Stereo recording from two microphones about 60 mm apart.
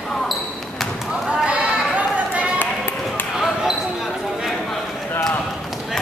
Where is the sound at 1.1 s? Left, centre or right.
Centre.